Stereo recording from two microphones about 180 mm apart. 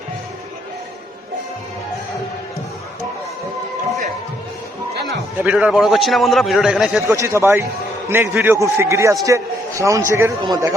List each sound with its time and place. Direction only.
4.9 s a sound: 65° right (ahead or behind)
5.4 s a man's voice: 5° right (ahead or behind)
7.1 s a man's voice: 15° right (ahead or behind)